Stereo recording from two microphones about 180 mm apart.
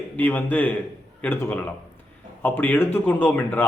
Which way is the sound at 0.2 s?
10° left (ahead or behind).